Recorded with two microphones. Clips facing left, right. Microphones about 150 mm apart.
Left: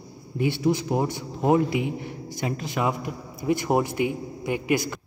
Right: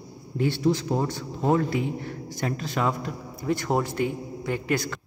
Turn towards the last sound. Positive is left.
turn(degrees=10)  # may be behind; listen again after turning